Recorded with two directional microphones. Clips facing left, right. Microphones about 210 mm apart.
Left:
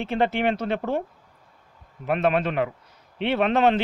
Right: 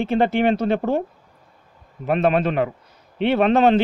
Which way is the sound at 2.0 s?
35° right (ahead or behind).